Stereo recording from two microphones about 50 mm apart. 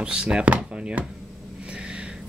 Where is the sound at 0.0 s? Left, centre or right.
Centre.